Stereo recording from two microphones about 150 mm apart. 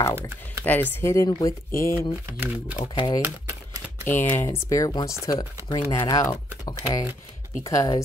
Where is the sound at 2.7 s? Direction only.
35° left (ahead or behind).